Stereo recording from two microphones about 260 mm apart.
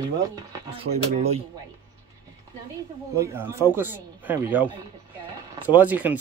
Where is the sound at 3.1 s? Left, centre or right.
Centre.